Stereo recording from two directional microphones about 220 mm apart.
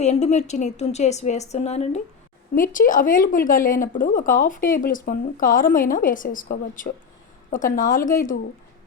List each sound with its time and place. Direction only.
0.0 s speech: 30° left (ahead or behind)